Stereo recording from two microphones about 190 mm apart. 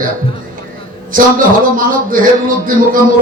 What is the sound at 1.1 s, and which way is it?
Speech, 45° right (ahead or behind).